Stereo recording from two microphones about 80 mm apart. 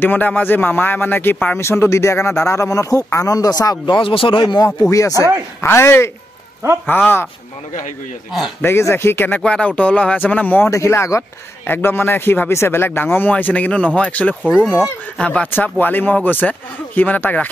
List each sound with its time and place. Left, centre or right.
0.0 s speech: left
1.6 s speech: left
3.8 s speech: left
5.2 s speech: left
8.5 s speech: left
9.4 s speech: centre
10.7 s speech: left; by 15.5 s centre
15.5 s speech: left